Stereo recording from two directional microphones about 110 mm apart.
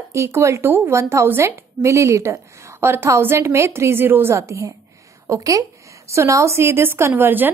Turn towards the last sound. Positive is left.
turn(degrees=-20)  # may be behind; listen again after turning